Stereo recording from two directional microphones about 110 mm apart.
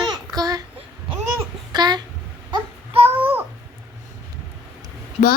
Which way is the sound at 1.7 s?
40° right (ahead or behind).